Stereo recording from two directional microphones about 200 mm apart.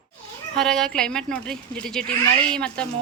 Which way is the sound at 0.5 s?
Centre (ahead or behind).